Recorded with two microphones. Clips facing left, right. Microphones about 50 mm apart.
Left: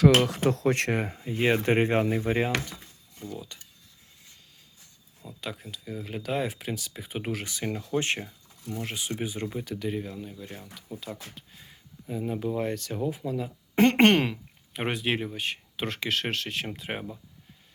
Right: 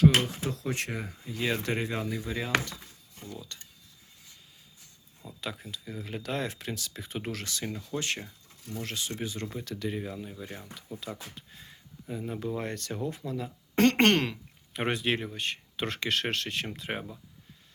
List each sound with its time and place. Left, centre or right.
0.0 s speech: left
1.1 s speech: left
3.2 s speech: centre
5.2 s speech: centre; by 8.2 s left
8.2 s a sound: centre
8.7 s speech: centre
10.0 s speech: centre
11.3 s a sound: centre
12.2 s speech: centre